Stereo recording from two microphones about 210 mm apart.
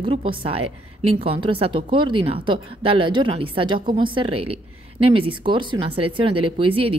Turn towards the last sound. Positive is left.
turn(degrees=-25)  # may be behind; listen again after turning